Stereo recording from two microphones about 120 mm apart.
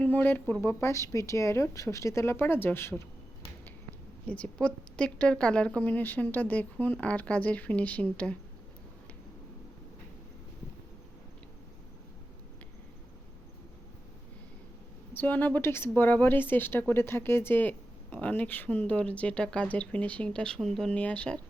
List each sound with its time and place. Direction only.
0.0 s a woman's voice: 15° left (ahead or behind)
4.3 s speech: 10° left (ahead or behind)
15.1 s speech: 15° left (ahead or behind)